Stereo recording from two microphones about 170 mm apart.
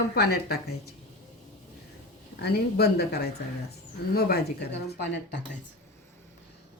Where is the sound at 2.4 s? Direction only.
65° left (ahead or behind); by 5.4 s 85° left.